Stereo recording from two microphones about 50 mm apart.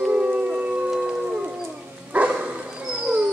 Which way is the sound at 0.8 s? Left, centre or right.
Centre.